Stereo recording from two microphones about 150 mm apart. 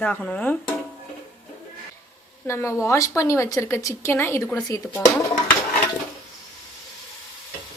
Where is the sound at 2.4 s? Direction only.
20° left (ahead or behind).